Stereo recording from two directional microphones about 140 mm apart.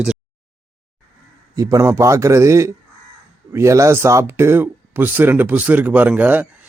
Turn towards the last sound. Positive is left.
turn(degrees=-10)  # may be behind; listen again after turning